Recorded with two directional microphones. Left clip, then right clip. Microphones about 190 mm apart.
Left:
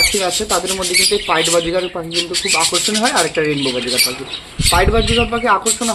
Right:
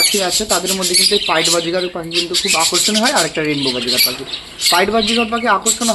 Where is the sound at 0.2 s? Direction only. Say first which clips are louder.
Right 1 dB; 10° right (ahead or behind).